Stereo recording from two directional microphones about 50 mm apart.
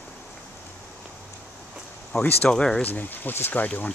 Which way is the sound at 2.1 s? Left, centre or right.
Left.